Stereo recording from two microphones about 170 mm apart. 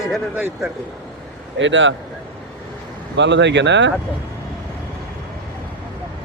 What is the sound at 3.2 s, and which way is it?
Speech, 90° right.